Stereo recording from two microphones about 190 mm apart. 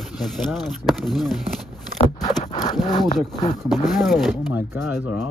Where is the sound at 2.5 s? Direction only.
20° left (ahead or behind).